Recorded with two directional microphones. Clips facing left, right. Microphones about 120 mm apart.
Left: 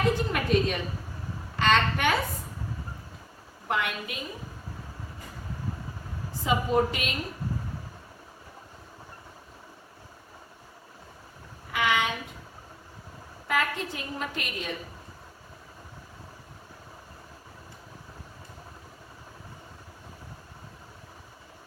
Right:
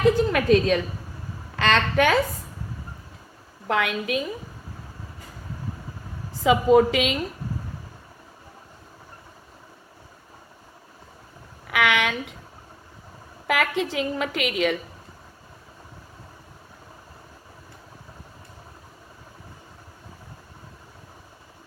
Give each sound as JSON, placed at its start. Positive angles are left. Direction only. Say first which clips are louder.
{"t": 0.3, "sound": "a woman's voice", "louder": "right 7 dB", "side_deg": -90}
{"t": 3.7, "sound": "a woman's voice", "louder": "right 6 dB", "side_deg": -90}
{"t": 6.4, "sound": "a woman's voice", "louder": "right 8 dB", "side_deg": -90}
{"t": 11.7, "sound": "a woman's voice", "louder": "right 4 dB", "side_deg": -80}
{"t": 13.5, "sound": "a woman's voice", "louder": "right 5 dB", "side_deg": -85}